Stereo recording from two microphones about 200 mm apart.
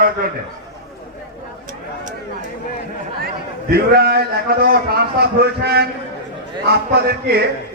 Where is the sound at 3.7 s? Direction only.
50° right (ahead or behind).